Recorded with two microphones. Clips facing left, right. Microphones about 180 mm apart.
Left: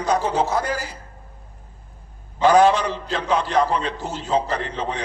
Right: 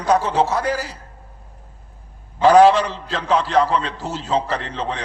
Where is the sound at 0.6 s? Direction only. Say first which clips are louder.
Right 4 dB; 35° right (ahead or behind).